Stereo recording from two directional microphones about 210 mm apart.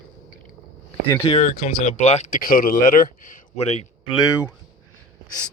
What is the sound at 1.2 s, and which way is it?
Speech, 35° left (ahead or behind).